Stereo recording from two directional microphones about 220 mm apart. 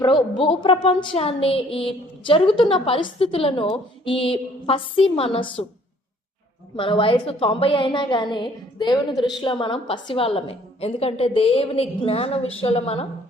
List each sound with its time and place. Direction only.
0.0 s a woman's voice: 20° left (ahead or behind)
6.7 s a woman's voice: 25° left (ahead or behind)